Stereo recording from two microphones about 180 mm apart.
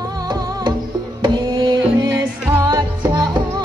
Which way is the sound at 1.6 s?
25° right (ahead or behind).